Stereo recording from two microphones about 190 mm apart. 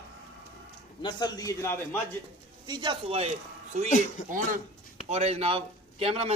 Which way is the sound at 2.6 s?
20° right (ahead or behind).